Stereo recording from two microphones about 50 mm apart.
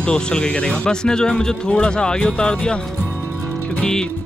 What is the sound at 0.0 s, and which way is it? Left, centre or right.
Speech, centre.